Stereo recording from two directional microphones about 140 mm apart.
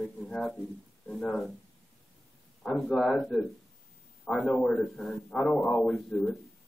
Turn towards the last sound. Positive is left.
turn(degrees=5)  # may be behind; listen again after turning